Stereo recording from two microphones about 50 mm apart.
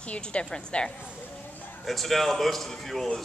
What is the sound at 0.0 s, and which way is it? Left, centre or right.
Speech, left.